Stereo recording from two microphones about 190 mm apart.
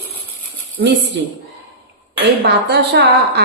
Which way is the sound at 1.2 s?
65° right (ahead or behind).